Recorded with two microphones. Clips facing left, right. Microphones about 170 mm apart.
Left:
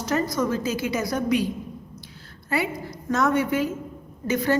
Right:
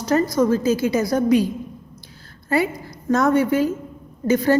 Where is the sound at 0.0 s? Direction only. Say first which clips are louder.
Right 6 dB; 35° right (ahead or behind).